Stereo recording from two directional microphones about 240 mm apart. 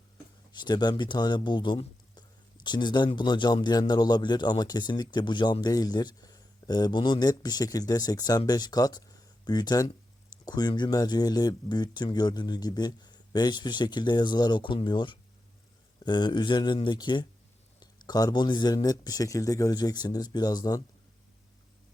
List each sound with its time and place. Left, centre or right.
0.5 s a man's voice: centre